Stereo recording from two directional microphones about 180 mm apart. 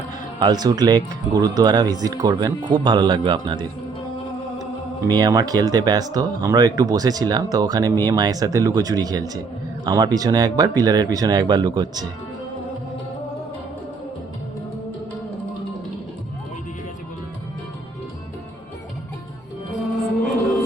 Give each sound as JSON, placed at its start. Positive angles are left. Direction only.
{"t": 0.3, "sound": "speech", "side_deg": -20}
{"t": 5.0, "sound": "speech", "side_deg": -20}